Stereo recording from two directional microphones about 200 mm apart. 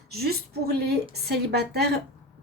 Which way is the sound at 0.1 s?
50° right (ahead or behind).